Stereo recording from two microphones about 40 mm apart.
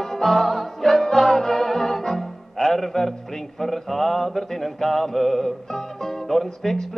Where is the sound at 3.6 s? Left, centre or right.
Centre.